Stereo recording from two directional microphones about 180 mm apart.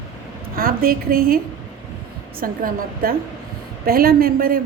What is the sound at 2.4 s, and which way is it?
A woman's voice, 50° right (ahead or behind).